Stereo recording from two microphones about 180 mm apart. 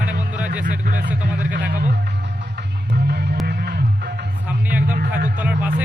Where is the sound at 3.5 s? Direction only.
70° right (ahead or behind).